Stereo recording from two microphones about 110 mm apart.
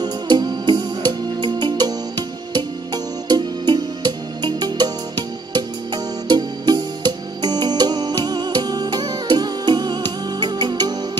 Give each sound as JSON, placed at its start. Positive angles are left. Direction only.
{"t": 0.0, "sound": "music", "side_deg": -40}